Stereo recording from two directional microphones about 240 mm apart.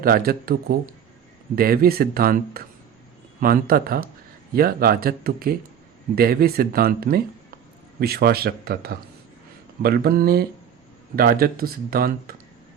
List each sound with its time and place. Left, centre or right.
0.0 s speech: right